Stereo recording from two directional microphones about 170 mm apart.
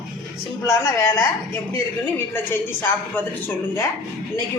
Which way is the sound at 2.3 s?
10° left (ahead or behind).